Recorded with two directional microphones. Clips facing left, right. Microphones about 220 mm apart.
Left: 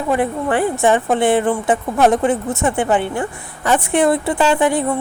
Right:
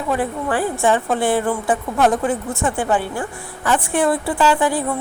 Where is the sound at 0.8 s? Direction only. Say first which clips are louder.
Left 2 dB; 20° left (ahead or behind).